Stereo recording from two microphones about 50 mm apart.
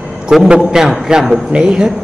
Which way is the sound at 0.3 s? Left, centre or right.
Centre.